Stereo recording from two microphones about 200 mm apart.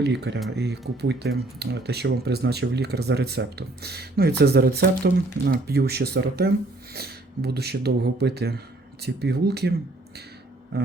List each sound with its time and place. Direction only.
0.0 s speech: 55° right (ahead or behind)